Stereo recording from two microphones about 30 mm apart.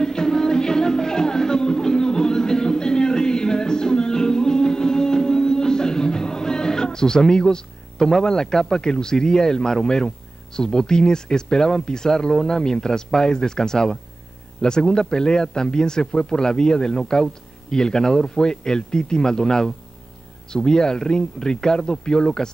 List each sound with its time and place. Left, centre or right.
0.0 s music: left
8.2 s speech: left